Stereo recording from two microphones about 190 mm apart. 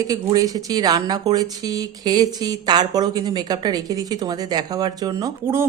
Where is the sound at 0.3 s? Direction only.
20° right (ahead or behind).